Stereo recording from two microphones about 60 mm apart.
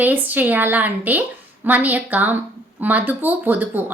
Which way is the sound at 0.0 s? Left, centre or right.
Right.